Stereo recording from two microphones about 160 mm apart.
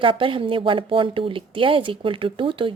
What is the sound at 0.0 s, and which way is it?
Speech, 30° right (ahead or behind).